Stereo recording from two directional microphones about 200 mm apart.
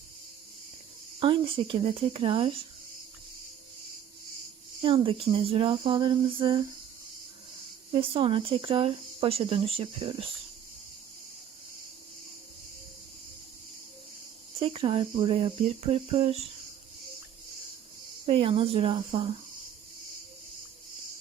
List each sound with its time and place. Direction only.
1.2 s speech: 25° right (ahead or behind)
4.8 s speech: 25° right (ahead or behind)
7.9 s speech: 25° right (ahead or behind)
14.6 s speech: 25° right (ahead or behind)
18.3 s speech: 30° right (ahead or behind)